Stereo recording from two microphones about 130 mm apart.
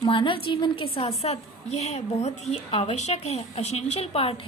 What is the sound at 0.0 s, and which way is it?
A woman's voice, 40° left (ahead or behind).